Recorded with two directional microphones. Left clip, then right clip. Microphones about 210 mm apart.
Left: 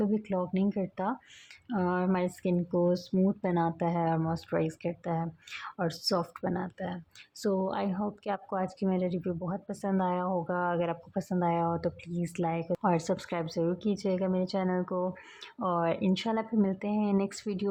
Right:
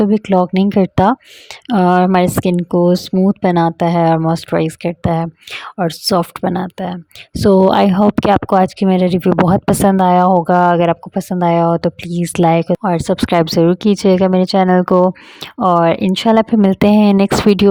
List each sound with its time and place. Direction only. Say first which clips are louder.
0.0 s speech: right 18 dB; 50° right (ahead or behind)